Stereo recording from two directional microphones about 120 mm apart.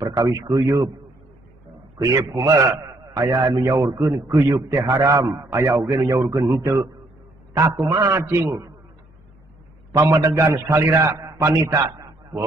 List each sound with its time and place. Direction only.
0.0 s a man's voice: 30° right (ahead or behind)
2.0 s a man's voice: 25° right (ahead or behind)
9.9 s a man's voice: 25° right (ahead or behind)